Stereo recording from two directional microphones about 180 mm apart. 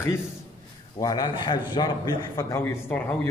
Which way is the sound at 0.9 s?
20° left (ahead or behind).